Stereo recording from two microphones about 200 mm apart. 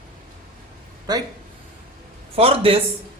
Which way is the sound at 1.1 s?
20° right (ahead or behind).